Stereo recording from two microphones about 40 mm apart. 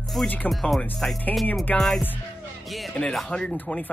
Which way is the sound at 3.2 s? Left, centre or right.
Left.